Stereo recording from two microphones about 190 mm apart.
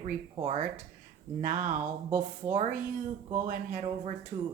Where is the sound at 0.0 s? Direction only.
35° right (ahead or behind).